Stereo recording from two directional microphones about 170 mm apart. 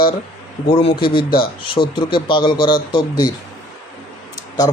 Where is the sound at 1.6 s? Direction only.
30° left (ahead or behind).